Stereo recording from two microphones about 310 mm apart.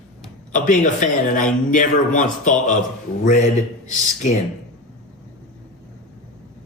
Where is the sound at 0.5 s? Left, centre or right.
Left.